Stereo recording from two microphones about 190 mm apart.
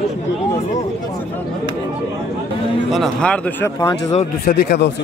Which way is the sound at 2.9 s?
Centre (ahead or behind).